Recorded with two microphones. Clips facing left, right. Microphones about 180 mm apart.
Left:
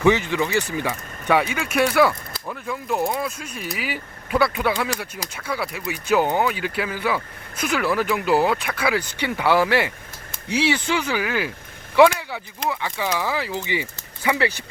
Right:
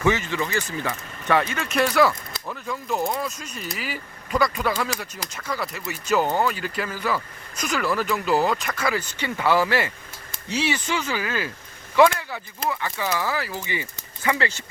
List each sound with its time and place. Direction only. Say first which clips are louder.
0.0 s speech: left 4 dB; 15° left (ahead or behind)
11.9 s a sound: left 2 dB; 15° left (ahead or behind)
12.6 s speech: left 1 dB; 15° left (ahead or behind)